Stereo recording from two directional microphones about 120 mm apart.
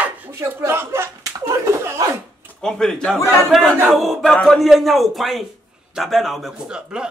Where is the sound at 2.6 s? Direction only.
5° left (ahead or behind).